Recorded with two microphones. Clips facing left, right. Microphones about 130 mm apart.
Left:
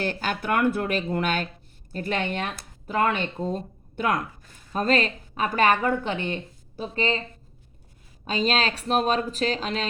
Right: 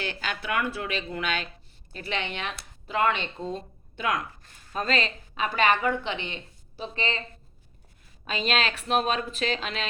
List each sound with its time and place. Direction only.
0.0 s a woman's voice: 45° left (ahead or behind)
8.2 s speech: 35° left (ahead or behind)